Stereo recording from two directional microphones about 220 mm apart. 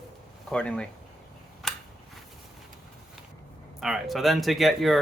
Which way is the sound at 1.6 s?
5° left (ahead or behind).